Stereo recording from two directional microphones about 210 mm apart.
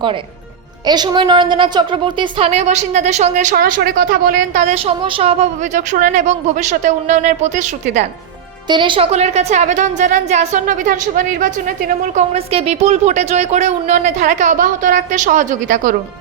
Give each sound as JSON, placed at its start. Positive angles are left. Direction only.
{"t": 0.9, "sound": "a woman's voice", "side_deg": -20}
{"t": 8.7, "sound": "a woman's voice", "side_deg": -25}
{"t": 12.1, "sound": "a woman's voice", "side_deg": -30}